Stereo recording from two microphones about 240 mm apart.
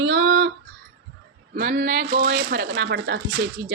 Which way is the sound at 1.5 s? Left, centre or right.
Right.